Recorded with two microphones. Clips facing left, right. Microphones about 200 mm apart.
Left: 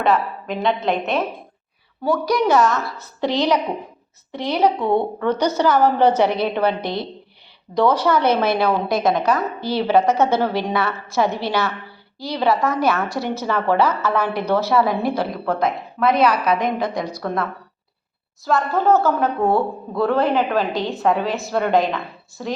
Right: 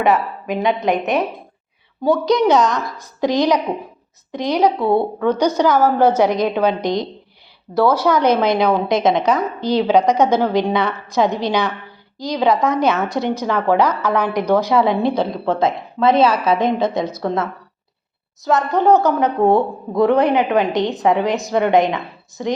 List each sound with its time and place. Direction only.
0.0 s a woman's voice: 15° right (ahead or behind)